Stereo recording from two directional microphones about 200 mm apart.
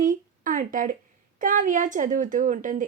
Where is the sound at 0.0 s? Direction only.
40° right (ahead or behind).